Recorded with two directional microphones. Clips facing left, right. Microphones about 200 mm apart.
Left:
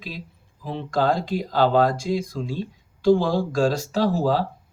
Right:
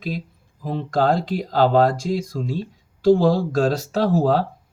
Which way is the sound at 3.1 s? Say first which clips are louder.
Right 3 dB; 45° right (ahead or behind).